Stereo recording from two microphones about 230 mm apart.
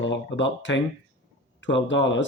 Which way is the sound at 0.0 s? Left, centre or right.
Left.